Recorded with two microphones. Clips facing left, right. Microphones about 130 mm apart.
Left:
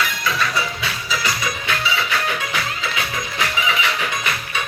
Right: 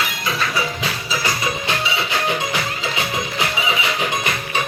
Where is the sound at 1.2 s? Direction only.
25° right (ahead or behind).